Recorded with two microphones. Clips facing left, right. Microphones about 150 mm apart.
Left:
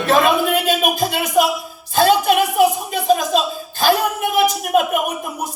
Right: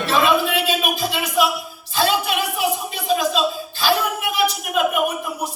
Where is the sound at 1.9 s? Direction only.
50° left (ahead or behind).